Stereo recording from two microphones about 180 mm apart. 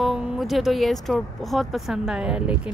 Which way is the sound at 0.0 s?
Centre (ahead or behind).